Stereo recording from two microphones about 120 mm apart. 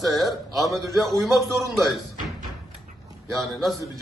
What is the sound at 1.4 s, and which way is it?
Speech, 25° right (ahead or behind).